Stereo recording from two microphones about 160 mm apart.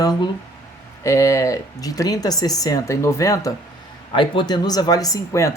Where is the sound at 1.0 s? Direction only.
20° left (ahead or behind).